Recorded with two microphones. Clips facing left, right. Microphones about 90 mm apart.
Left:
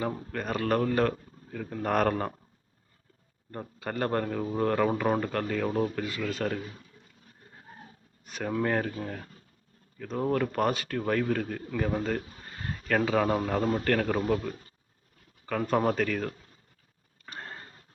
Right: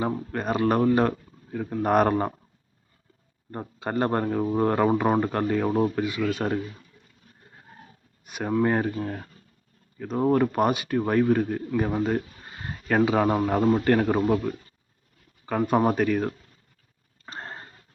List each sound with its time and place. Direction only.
0.0 s speech: 20° right (ahead or behind)
3.5 s speech: 25° right (ahead or behind)
8.2 s speech: 15° right (ahead or behind)
17.2 s a sound: 35° right (ahead or behind)